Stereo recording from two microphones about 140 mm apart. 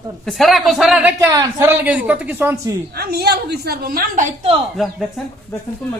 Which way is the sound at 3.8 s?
90° right.